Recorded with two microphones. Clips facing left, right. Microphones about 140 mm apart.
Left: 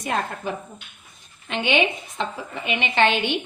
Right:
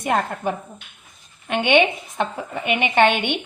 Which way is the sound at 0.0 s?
55° right (ahead or behind).